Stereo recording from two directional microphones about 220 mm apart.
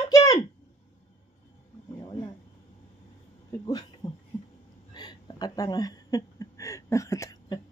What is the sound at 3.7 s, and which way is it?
Speech, 20° left (ahead or behind).